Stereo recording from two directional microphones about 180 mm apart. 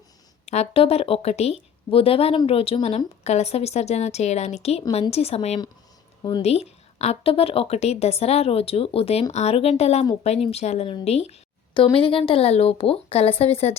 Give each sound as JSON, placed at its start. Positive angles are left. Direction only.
{"t": 0.4, "sound": "a woman's voice", "side_deg": 35}